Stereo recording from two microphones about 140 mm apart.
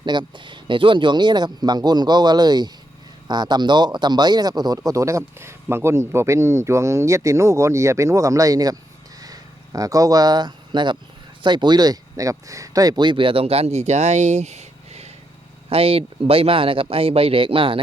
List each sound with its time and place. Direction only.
0.0 s speech: 35° right (ahead or behind)